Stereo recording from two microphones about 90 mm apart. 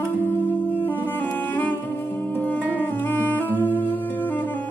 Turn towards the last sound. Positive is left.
turn(degrees=20)  # may be behind; listen again after turning